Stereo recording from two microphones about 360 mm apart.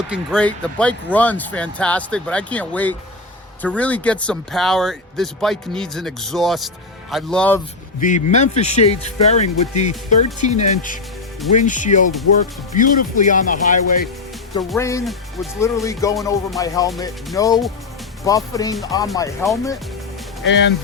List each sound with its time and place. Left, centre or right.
0.1 s speech: centre
8.0 s speech: centre
14.7 s speech: centre
20.4 s speech: left